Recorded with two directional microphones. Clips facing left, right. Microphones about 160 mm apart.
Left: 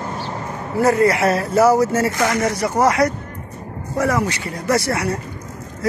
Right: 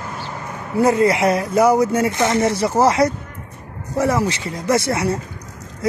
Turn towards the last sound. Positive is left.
turn(degrees=-25)  # may be behind; listen again after turning